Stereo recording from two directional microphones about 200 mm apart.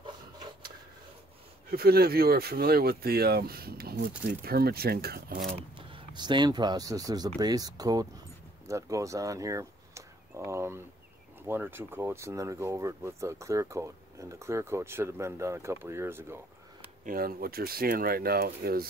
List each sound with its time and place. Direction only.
1.7 s speech: 50° right (ahead or behind)
5.8 s speech: 25° right (ahead or behind)
17.0 s speech: 45° right (ahead or behind)